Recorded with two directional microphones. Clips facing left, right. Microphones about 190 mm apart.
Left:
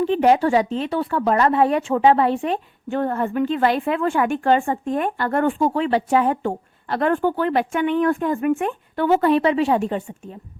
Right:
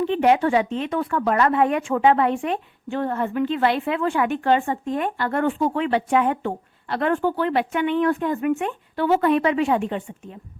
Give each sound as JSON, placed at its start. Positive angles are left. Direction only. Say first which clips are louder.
{"t": 0.0, "sound": "a woman's voice", "louder": "left 2 dB", "side_deg": 40}
{"t": 2.9, "sound": "a woman's voice", "louder": "left 2 dB", "side_deg": 45}
{"t": 5.6, "sound": "a woman's voice", "louder": "left 2 dB", "side_deg": 35}